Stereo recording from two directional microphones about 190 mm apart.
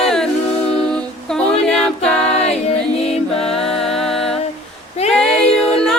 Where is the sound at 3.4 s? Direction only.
Centre (ahead or behind).